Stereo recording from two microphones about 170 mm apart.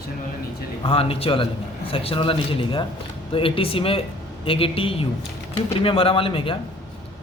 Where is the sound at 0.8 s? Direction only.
35° left (ahead or behind).